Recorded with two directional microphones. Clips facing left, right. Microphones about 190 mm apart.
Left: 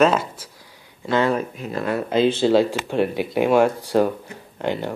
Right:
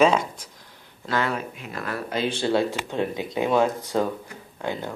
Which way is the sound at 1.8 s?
25° left (ahead or behind).